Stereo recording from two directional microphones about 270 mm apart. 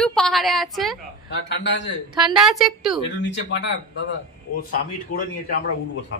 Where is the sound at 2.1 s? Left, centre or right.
Centre.